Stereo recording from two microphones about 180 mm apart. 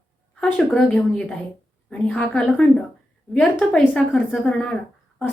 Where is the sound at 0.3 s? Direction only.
5° left (ahead or behind).